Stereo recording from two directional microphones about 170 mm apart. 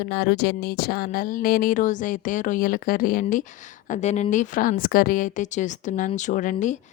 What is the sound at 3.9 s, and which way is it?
Speech, 40° left (ahead or behind).